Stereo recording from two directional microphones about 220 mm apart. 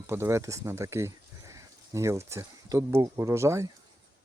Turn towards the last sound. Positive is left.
turn(degrees=-15)  # may be behind; listen again after turning